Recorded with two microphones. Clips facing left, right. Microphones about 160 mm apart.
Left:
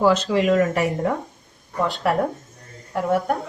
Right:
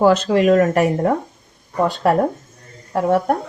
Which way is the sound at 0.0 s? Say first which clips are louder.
Right 4 dB; 55° right (ahead or behind).